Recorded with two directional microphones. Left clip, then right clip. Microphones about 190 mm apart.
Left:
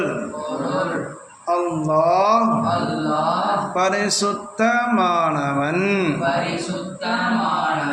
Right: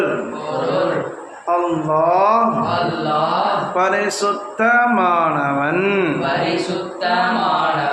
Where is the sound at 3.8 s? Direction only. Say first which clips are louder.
Right 2 dB; 35° left (ahead or behind).